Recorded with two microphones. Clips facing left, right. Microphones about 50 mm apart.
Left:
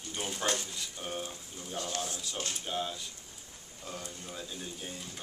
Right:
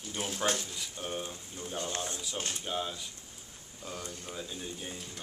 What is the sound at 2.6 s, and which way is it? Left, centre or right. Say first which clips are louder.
Speech: left 1 dB; centre.